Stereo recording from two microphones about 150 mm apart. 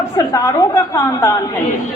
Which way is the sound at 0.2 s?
20° left (ahead or behind).